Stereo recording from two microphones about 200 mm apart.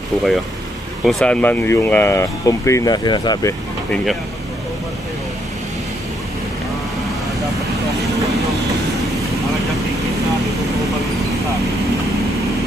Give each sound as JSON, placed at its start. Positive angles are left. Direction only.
{"t": 1.0, "sound": "speech", "side_deg": 5}
{"t": 3.9, "sound": "speech", "side_deg": 0}